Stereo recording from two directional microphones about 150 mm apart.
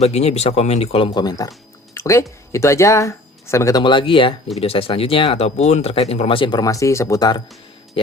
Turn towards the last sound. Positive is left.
turn(degrees=25)  # may be behind; listen again after turning